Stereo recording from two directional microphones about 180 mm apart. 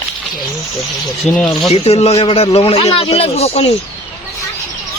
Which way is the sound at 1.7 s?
35° left (ahead or behind).